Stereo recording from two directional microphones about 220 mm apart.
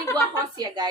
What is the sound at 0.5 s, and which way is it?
Speech, 20° right (ahead or behind).